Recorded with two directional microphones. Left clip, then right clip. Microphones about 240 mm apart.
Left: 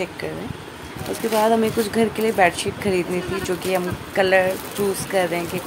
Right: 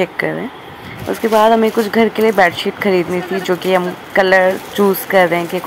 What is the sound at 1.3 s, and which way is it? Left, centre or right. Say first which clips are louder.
Speech: right 7 dB; centre.